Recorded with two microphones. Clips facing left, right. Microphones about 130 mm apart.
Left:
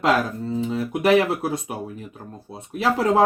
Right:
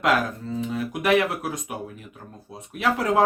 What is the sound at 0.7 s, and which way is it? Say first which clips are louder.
Speech: left 3 dB; 30° left (ahead or behind).